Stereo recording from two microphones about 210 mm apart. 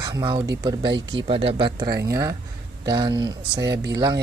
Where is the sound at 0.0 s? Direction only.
20° right (ahead or behind).